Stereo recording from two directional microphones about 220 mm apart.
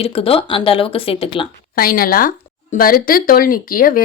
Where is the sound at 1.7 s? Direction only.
40° left (ahead or behind).